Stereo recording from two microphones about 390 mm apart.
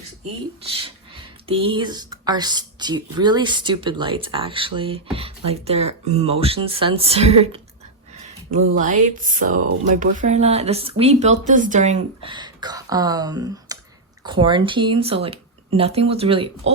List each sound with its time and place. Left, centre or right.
0.6 s speech: centre